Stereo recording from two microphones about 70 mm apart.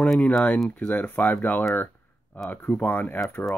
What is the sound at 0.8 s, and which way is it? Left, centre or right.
Speech, left.